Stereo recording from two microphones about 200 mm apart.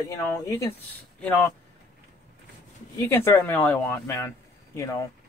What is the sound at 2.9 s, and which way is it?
Speech, 10° left (ahead or behind).